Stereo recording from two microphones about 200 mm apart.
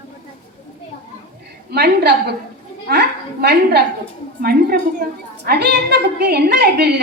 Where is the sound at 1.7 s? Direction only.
55° right (ahead or behind).